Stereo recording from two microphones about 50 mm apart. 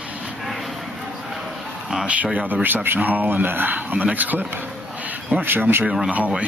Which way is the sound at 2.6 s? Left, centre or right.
Right.